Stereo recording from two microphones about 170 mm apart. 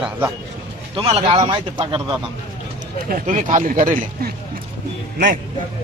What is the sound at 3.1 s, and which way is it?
Speech, 50° right (ahead or behind).